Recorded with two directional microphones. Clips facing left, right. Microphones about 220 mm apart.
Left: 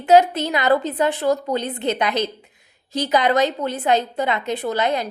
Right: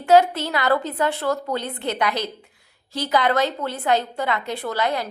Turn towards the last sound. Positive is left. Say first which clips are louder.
# left 3 dB
turn(degrees=20)  # may be behind; listen again after turning